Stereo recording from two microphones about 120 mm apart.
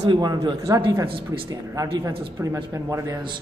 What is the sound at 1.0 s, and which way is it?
Speech, 50° right (ahead or behind).